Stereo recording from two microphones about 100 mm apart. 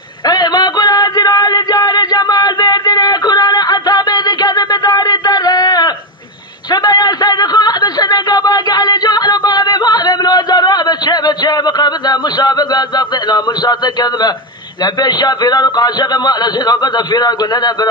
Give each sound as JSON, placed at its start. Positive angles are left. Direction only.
{"t": 0.3, "sound": "music", "side_deg": 45}
{"t": 6.7, "sound": "a sound", "side_deg": 45}
{"t": 15.0, "sound": "a man's voice", "side_deg": 45}